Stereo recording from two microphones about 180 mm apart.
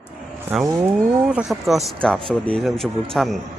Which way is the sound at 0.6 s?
15° right (ahead or behind).